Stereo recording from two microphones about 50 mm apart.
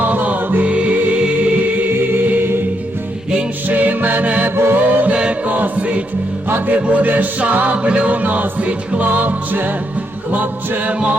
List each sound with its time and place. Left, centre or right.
0.0 s music: right
1.9 s music: right
3.7 s music: right
4.5 s music: right
4.8 s a capella: right
5.5 s choir: right
6.7 s music: right